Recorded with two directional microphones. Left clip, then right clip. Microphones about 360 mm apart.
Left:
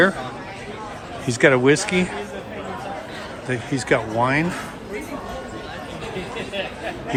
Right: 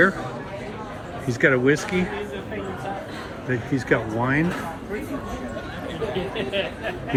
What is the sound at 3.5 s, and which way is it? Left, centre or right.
Speech, centre.